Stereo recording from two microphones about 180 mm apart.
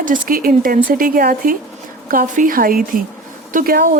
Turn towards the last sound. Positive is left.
turn(degrees=-55)  # may be behind; listen again after turning